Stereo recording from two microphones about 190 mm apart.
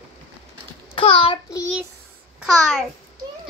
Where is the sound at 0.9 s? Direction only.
30° left (ahead or behind).